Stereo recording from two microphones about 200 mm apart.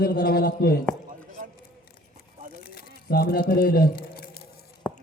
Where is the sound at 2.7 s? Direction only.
50° left (ahead or behind).